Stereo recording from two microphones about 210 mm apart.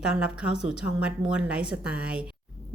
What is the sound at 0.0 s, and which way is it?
A woman's voice, 5° right (ahead or behind).